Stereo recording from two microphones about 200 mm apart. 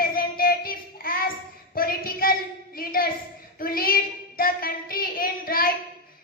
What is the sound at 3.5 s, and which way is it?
Child singing, 45° left (ahead or behind).